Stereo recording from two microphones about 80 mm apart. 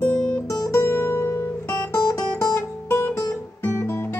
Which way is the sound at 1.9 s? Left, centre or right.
Left.